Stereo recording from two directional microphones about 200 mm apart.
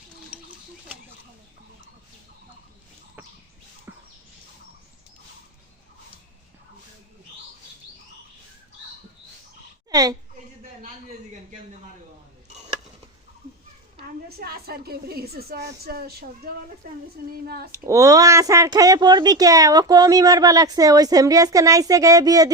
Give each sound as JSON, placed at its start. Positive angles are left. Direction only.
{"t": 0.3, "sound": "a sound", "side_deg": -5}
{"t": 9.9, "sound": "a woman's voice", "side_deg": -20}
{"t": 14.3, "sound": "speech", "side_deg": -50}
{"t": 17.7, "sound": "speech", "side_deg": -15}